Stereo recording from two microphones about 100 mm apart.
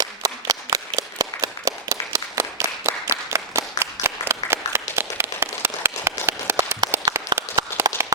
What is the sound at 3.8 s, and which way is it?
Applause, 25° right (ahead or behind).